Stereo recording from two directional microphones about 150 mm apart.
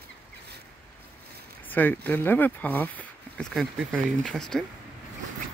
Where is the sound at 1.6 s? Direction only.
10° left (ahead or behind).